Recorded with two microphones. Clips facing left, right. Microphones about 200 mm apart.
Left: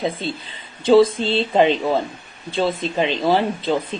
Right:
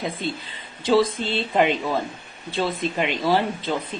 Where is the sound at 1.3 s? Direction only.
25° left (ahead or behind).